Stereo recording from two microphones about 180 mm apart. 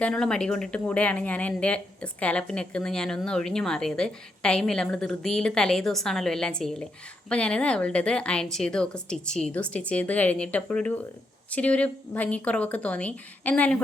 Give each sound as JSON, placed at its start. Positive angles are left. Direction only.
{"t": 0.0, "sound": "a woman's voice", "side_deg": 5}